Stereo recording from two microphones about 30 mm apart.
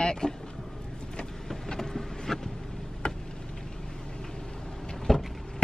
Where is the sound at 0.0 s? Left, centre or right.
Left.